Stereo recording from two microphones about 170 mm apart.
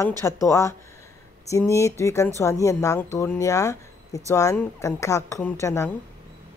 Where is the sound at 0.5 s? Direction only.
15° left (ahead or behind).